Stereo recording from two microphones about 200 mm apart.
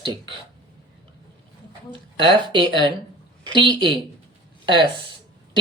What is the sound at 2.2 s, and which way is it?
Speech, 25° right (ahead or behind).